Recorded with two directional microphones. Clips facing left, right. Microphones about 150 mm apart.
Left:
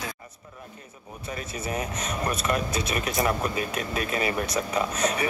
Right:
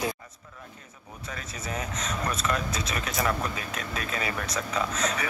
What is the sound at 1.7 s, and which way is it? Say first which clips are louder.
Speech: left 2 dB; 10° left (ahead or behind).